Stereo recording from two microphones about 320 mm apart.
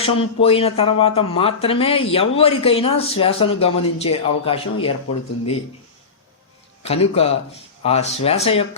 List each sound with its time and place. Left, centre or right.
0.0 s speech: centre
6.8 s speech: centre